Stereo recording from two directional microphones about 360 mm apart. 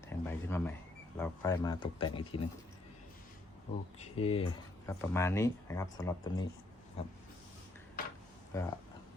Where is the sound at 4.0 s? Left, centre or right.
Centre.